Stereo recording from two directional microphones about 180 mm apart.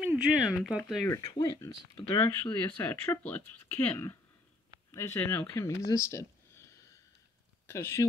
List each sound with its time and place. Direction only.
0.0 s speech: 5° right (ahead or behind)
1.0 s speech: 15° left (ahead or behind)
7.6 s speech: 15° left (ahead or behind)